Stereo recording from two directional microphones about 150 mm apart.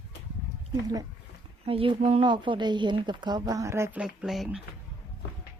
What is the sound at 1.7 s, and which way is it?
Speech, 40° right (ahead or behind).